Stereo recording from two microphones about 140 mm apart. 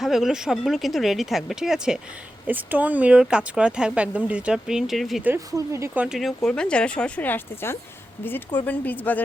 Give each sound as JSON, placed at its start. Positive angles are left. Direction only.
{"t": 0.0, "sound": "speech", "side_deg": 0}
{"t": 5.5, "sound": "speech", "side_deg": -20}
{"t": 6.0, "sound": "speech", "side_deg": 0}